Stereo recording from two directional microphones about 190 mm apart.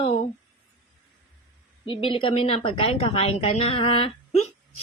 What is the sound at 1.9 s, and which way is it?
A woman's voice, 30° left (ahead or behind).